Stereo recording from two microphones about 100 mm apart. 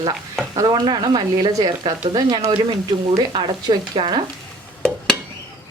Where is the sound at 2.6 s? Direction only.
55° right (ahead or behind).